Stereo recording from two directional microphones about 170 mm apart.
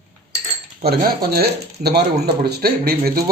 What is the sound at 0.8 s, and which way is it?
Speech, 65° right (ahead or behind).